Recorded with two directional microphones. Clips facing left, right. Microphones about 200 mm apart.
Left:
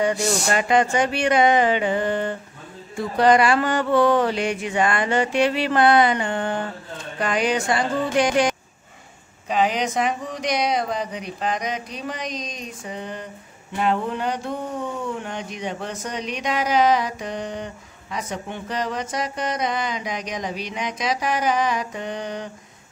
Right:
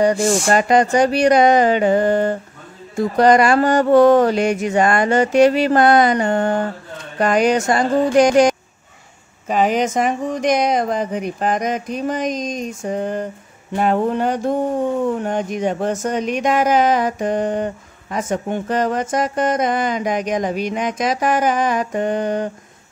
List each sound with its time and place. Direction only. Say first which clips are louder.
0.0 s speech: right 6 dB; 35° right (ahead or behind)